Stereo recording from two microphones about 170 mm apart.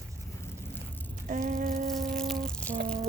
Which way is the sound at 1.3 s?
50° right (ahead or behind).